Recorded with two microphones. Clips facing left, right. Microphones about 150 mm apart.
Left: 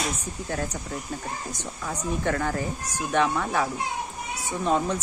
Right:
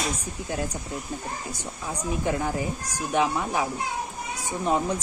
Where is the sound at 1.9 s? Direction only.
10° right (ahead or behind).